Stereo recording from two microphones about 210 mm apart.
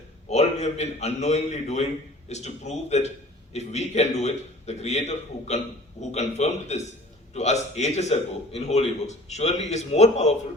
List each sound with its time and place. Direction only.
0.3 s a man's voice: 30° left (ahead or behind)